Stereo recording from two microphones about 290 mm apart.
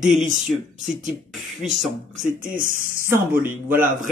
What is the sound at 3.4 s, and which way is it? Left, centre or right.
Speech, centre.